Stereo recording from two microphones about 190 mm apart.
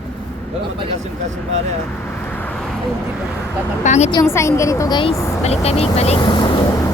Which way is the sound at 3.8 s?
40° left (ahead or behind).